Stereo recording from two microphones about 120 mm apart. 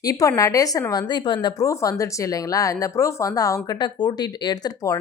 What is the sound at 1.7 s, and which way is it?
Speech, 25° left (ahead or behind).